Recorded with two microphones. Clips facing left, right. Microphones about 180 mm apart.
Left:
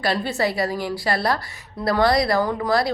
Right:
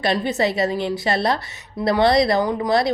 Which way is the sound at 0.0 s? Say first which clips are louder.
Right 2 dB; 20° right (ahead or behind).